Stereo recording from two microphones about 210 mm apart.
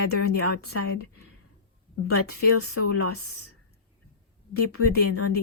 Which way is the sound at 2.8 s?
90° left.